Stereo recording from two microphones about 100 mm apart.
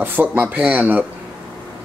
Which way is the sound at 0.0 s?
20° right (ahead or behind).